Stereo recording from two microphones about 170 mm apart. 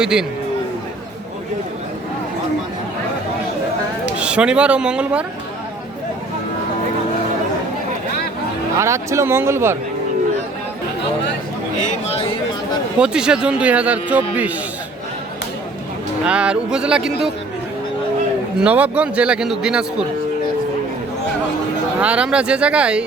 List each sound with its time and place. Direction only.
0.0 s speech: 5° right (ahead or behind)
4.2 s speech: 5° right (ahead or behind)
8.8 s speech: 15° right (ahead or behind)
13.0 s speech: 5° right (ahead or behind)
16.2 s speech: 5° right (ahead or behind)
18.6 s speech: 10° right (ahead or behind)
22.0 s speech: 5° right (ahead or behind)